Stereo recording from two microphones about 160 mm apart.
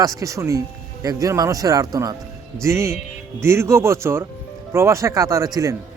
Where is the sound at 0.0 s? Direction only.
20° right (ahead or behind).